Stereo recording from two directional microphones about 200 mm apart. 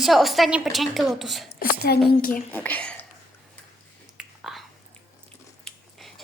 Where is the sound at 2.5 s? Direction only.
10° left (ahead or behind).